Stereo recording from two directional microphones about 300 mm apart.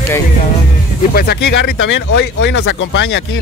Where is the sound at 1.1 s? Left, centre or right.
Left.